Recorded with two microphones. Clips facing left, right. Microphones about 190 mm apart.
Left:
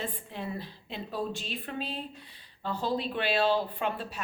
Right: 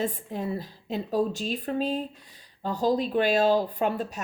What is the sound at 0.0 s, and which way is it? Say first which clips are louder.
Speech: right 7 dB; 40° right (ahead or behind).